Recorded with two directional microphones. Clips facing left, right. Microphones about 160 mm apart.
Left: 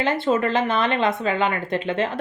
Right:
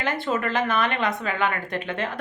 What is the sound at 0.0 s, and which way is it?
Speech, 25° left (ahead or behind).